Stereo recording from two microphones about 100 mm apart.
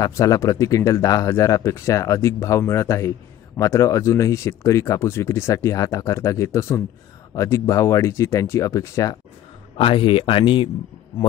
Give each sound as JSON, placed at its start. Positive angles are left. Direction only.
{"t": 0.0, "sound": "speech", "side_deg": 35}
{"t": 9.8, "sound": "speech", "side_deg": 60}